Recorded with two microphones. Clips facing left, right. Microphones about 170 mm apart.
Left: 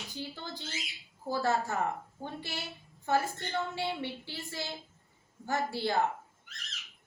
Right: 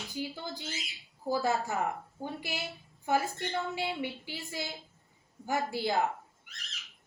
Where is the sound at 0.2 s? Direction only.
10° right (ahead or behind).